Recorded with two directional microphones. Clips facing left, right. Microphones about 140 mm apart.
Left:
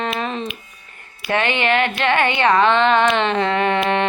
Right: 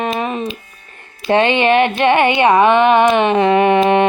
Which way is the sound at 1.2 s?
25° right (ahead or behind).